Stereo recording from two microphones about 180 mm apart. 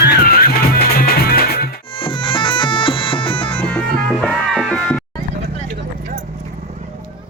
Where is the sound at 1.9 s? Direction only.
25° left (ahead or behind).